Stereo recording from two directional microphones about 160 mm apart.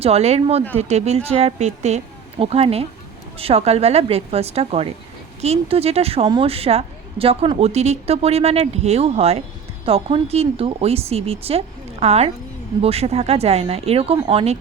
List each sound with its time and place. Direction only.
0.0 s a woman's voice: 40° right (ahead or behind)